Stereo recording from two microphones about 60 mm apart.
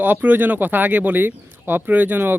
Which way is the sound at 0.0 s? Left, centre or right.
Right.